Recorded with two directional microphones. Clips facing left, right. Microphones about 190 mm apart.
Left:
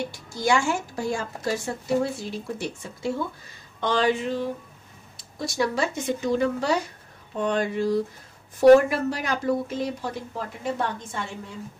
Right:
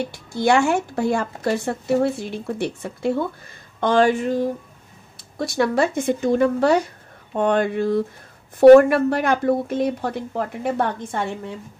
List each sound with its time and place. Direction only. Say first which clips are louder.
0.1 s a woman's voice: right 6 dB; 60° right (ahead or behind)
3.8 s speech: right 6 dB; 50° right (ahead or behind)
5.4 s a woman's voice: right 6 dB; 55° right (ahead or behind)